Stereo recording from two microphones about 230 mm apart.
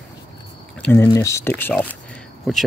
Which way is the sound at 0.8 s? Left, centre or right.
Centre.